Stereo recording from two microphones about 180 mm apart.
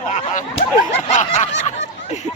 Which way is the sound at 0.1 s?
40° left (ahead or behind).